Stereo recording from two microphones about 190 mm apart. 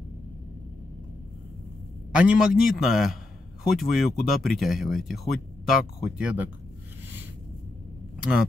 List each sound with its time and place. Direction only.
2.1 s speech: 5° right (ahead or behind)